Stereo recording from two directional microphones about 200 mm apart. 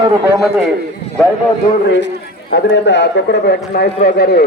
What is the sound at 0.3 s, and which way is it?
Speech, centre (ahead or behind).